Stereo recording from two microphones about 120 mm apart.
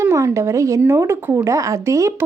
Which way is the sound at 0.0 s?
25° right (ahead or behind).